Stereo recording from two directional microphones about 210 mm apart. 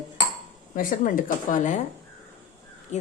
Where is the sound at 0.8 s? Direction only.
40° left (ahead or behind).